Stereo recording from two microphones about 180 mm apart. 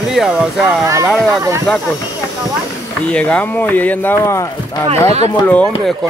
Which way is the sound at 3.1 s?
5° left (ahead or behind).